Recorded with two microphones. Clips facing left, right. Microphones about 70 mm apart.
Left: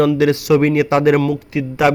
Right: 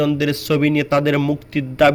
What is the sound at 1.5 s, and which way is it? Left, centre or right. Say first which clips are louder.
Speech: right 3 dB; centre.